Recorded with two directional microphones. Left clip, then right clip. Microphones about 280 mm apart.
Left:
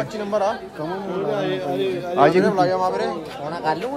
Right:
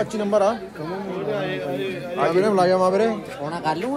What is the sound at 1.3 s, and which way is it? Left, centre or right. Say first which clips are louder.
Speech: left 3 dB; left.